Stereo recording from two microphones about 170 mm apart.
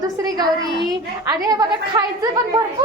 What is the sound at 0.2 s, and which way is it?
Speech, 20° right (ahead or behind).